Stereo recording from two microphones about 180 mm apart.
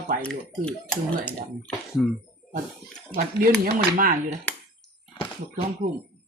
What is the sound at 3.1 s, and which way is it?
Speech, 60° right (ahead or behind).